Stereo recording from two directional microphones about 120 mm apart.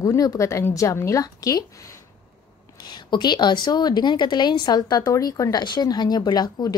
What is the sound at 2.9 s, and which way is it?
A woman's voice, 35° left (ahead or behind).